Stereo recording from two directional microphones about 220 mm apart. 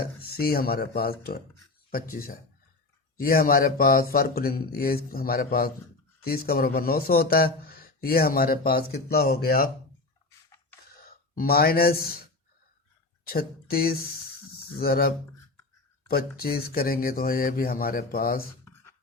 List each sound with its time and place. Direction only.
0.0 s speech: 45° left (ahead or behind)
11.3 s speech: 45° left (ahead or behind)
13.2 s speech: 45° left (ahead or behind)
18.6 s a sound: 10° left (ahead or behind)